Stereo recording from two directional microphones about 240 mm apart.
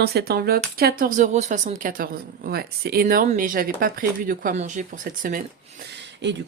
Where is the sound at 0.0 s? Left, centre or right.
Right.